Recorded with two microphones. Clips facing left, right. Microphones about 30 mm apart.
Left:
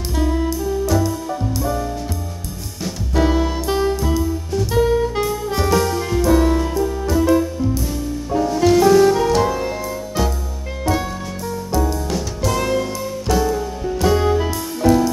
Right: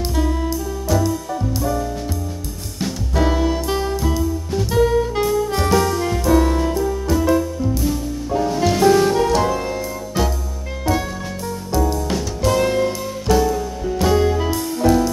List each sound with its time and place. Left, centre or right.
0.1 s music: centre
3.2 s music: centre
10.9 s music: centre
12.7 s music: centre
13.3 s music: centre